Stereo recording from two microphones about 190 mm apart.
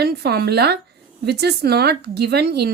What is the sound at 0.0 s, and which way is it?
Speech, 55° right (ahead or behind).